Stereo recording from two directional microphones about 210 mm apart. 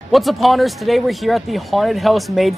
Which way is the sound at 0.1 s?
Centre (ahead or behind).